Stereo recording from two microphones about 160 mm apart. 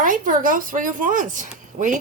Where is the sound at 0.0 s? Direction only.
60° right (ahead or behind).